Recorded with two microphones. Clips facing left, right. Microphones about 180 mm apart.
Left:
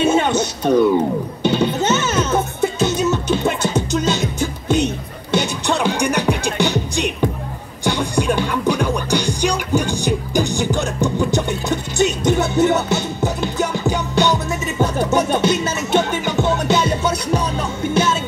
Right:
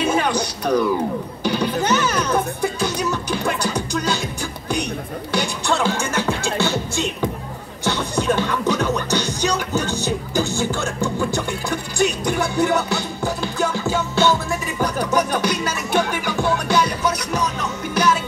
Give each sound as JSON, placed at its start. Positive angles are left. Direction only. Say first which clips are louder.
{"t": 0.0, "sound": "music", "louder": "left 4 dB", "side_deg": 25}